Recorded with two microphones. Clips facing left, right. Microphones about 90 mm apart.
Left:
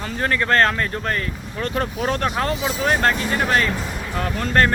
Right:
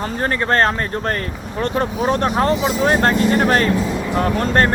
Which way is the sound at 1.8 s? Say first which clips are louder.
Right 4 dB; 25° right (ahead or behind).